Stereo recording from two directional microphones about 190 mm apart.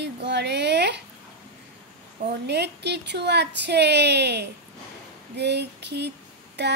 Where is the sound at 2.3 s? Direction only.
60° right (ahead or behind).